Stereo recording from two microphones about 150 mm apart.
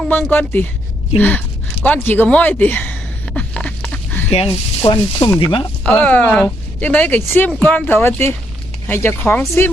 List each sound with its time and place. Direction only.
0.1 s speech: 15° left (ahead or behind)
3.3 s a sound: 10° left (ahead or behind)
4.3 s speech: 40° left (ahead or behind)
5.8 s speech: 10° left (ahead or behind)